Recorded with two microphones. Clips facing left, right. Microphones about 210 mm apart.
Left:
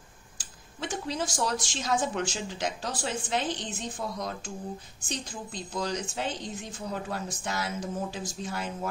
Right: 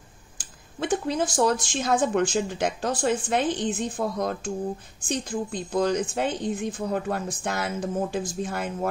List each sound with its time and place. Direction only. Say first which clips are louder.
0.4 s a woman's voice: right 7 dB; 55° right (ahead or behind)